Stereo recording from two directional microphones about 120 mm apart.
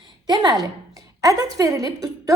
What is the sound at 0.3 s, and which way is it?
A woman's voice, 35° right (ahead or behind).